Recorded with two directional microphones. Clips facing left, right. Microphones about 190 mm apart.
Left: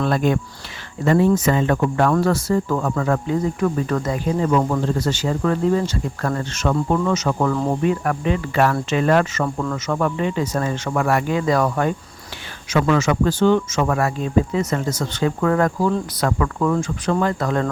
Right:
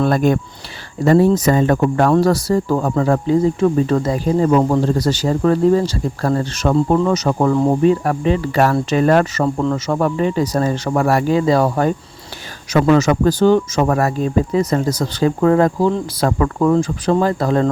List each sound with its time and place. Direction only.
0.0 s speech: 45° right (ahead or behind)